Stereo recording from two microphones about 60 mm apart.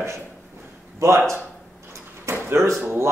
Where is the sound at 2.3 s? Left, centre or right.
Right.